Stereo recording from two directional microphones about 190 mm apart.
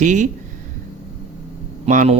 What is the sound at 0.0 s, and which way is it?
Speech, 40° right (ahead or behind).